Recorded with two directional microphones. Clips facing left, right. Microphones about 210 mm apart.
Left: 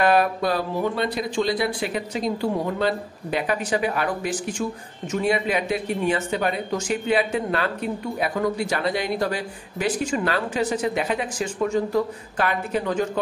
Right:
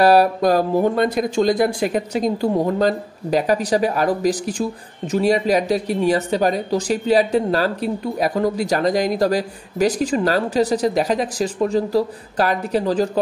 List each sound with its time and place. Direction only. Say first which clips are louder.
0.0 s speech: right 6 dB; 35° right (ahead or behind)